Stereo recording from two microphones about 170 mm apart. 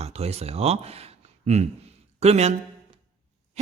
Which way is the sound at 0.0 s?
40° right (ahead or behind).